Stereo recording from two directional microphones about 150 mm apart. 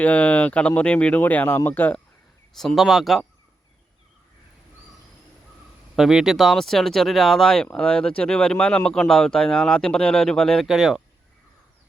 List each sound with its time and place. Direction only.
0.0 s speech: 10° left (ahead or behind)
2.6 s speech: centre (ahead or behind)
6.0 s speech: 5° right (ahead or behind)